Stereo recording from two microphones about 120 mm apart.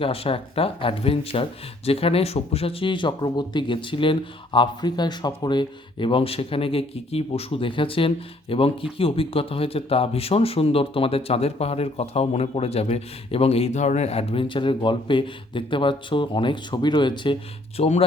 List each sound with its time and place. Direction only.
0.0 s speech: 50° left (ahead or behind)
17.7 s speech: 65° left (ahead or behind)